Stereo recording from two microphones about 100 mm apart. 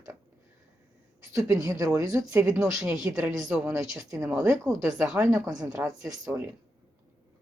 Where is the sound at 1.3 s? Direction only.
30° right (ahead or behind).